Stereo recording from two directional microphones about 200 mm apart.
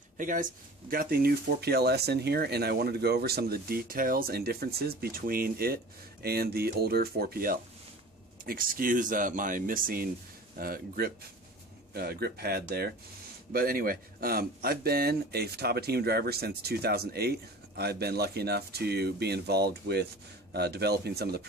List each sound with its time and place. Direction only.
0.2 s speech: 40° right (ahead or behind)